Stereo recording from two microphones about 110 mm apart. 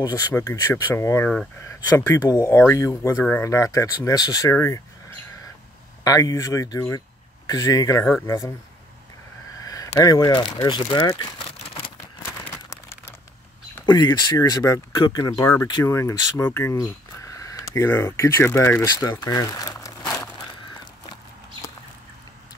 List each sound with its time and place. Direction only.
0.0 s speech: 30° left (ahead or behind)
6.0 s speech: 30° left (ahead or behind)
9.6 s a sound: 35° left (ahead or behind)
9.9 s speech: 30° left (ahead or behind)
11.1 s crumpling: 50° left (ahead or behind)
12.4 s crumpling: 35° left (ahead or behind)
13.8 s speech: 40° left (ahead or behind)
15.8 s speech: 25° left (ahead or behind)
16.4 s a sound: 20° left (ahead or behind)
17.8 s speech: 20° left (ahead or behind)
18.9 s speech: 35° left (ahead or behind)